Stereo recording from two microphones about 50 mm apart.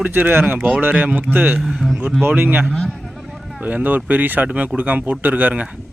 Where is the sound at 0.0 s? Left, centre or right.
Right.